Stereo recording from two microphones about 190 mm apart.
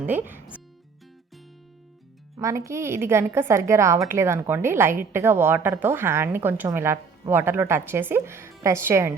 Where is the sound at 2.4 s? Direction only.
15° right (ahead or behind).